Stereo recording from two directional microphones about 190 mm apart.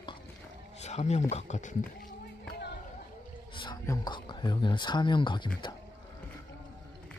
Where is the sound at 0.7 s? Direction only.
35° left (ahead or behind).